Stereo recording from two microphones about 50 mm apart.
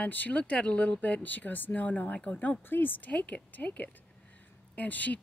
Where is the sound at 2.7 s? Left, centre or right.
Left.